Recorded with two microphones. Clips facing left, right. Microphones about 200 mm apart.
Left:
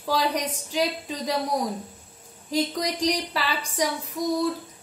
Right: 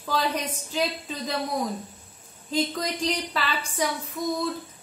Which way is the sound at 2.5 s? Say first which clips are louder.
Left 1 dB; 15° left (ahead or behind).